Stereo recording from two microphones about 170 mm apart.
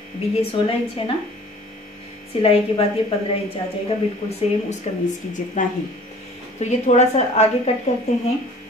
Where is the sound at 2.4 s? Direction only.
35° left (ahead or behind).